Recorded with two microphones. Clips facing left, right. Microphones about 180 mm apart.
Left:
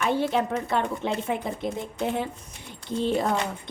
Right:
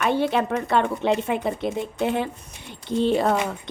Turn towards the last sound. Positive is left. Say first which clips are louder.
# right 4 dB
turn(degrees=-75)  # may be behind; listen again after turning